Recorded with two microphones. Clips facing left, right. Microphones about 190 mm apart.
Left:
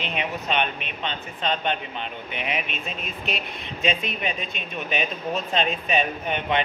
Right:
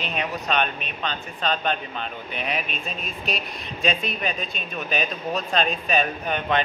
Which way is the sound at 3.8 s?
20° left (ahead or behind).